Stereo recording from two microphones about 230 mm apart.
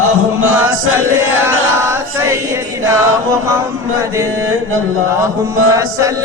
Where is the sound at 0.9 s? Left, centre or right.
Centre.